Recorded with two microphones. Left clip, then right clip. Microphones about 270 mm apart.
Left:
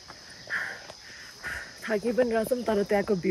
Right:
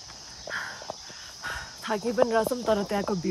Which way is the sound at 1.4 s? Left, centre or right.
Centre.